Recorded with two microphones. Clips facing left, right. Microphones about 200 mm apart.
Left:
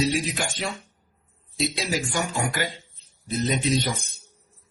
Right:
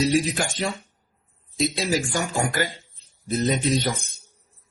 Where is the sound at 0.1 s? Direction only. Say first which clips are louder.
Right 5 dB; 40° right (ahead or behind).